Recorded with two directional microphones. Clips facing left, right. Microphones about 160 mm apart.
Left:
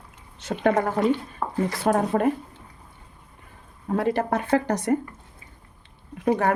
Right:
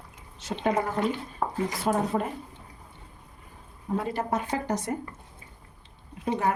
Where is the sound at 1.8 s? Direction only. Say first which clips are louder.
Left 6 dB; 65° left (ahead or behind).